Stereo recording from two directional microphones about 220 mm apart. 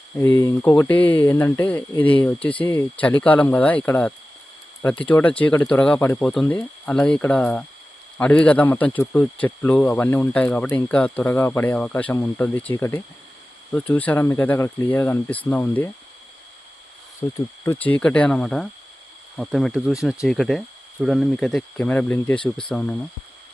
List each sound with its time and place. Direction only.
0.2 s speech: 15° left (ahead or behind)
17.2 s speech: 10° left (ahead or behind)